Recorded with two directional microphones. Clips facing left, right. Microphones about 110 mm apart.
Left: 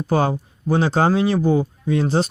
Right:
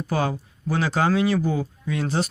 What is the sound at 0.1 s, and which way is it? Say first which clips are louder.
Speech: left 6 dB; 30° left (ahead or behind).